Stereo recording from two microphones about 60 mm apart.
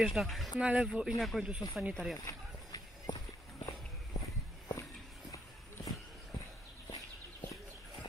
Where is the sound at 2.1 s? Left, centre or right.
Left.